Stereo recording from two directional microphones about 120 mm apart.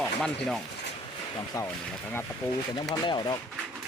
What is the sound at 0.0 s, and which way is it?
Speech, centre (ahead or behind).